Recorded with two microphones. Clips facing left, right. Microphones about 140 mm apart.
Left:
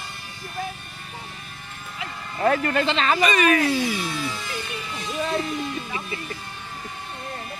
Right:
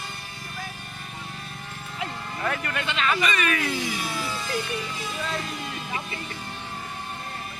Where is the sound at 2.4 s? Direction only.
35° left (ahead or behind).